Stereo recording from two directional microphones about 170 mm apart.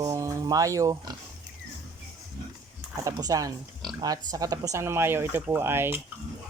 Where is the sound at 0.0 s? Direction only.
20° right (ahead or behind).